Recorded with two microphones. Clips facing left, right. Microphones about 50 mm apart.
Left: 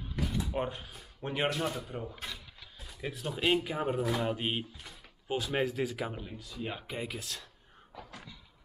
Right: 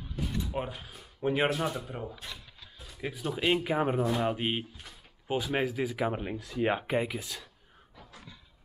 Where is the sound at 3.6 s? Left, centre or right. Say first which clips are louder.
Right 4 dB; right; by 6.1 s centre.